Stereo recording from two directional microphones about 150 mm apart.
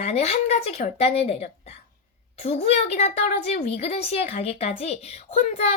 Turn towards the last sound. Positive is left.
turn(degrees=45)  # may be behind; listen again after turning